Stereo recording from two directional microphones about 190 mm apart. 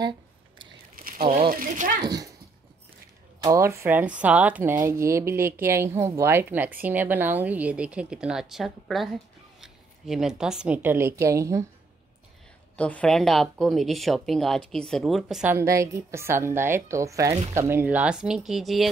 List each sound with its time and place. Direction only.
0.9 s a sound: 50° right (ahead or behind)
3.3 s speech: 20° right (ahead or behind)
12.7 s speech: 5° left (ahead or behind)
15.5 s speech: 15° right (ahead or behind)